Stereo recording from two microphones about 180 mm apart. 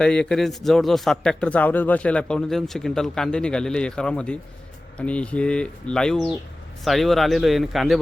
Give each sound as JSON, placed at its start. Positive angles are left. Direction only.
{"t": 0.0, "sound": "speech", "side_deg": 5}